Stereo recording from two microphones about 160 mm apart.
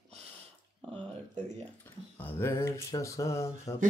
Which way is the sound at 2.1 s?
10° left (ahead or behind).